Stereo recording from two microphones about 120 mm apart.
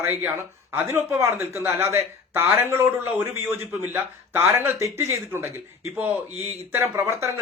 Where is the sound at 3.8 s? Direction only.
20° right (ahead or behind).